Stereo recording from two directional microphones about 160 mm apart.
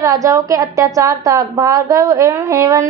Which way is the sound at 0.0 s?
20° right (ahead or behind).